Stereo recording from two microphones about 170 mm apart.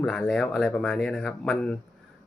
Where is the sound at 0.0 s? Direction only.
5° left (ahead or behind).